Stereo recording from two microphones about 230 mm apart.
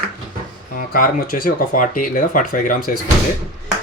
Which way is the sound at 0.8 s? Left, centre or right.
Left.